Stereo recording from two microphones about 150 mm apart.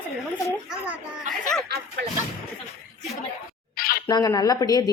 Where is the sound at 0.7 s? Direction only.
5° right (ahead or behind).